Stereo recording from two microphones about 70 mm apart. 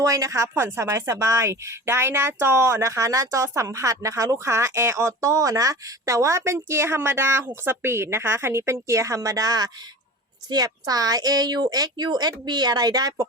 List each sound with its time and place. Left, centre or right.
0.0 s a woman's voice: right
0.5 s a woman's voice: right